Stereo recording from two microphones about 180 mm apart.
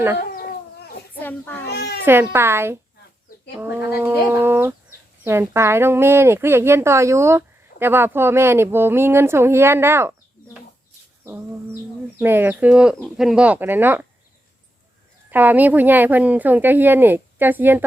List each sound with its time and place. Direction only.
0.2 s chicken: 55° left (ahead or behind)
1.2 s a child's voice: 10° left (ahead or behind)
1.6 s a child's voice: 65° left (ahead or behind)
2.0 s speech: 10° right (ahead or behind)
12.2 s speech: 10° right (ahead or behind)
15.3 s speech: 10° right (ahead or behind)